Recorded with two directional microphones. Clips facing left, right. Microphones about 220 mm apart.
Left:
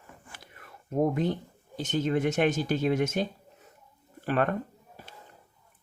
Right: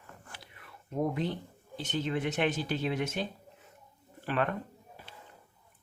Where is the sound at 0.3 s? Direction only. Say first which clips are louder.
Left 2 dB; 45° left (ahead or behind).